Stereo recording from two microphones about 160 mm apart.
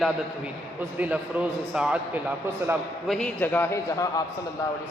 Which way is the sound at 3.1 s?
10° left (ahead or behind).